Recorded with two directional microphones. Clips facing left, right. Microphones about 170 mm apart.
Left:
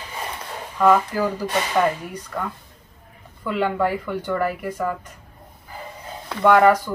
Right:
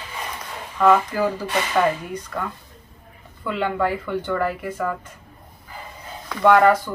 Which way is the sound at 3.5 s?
10° left (ahead or behind).